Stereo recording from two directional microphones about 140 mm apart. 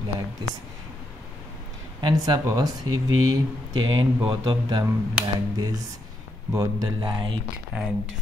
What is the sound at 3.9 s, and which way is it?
Speech, 35° right (ahead or behind).